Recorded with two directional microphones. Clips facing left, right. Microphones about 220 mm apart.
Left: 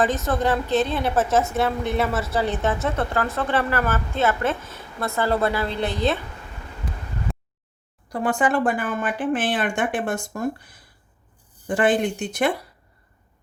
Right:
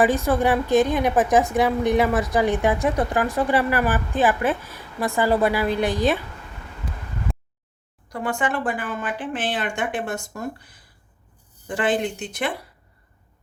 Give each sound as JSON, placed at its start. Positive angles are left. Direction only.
{"t": 0.0, "sound": "a woman's voice", "side_deg": -15}
{"t": 7.3, "sound": "a sound", "side_deg": 0}
{"t": 8.1, "sound": "a woman's voice", "side_deg": 35}
{"t": 11.8, "sound": "a woman's voice", "side_deg": 45}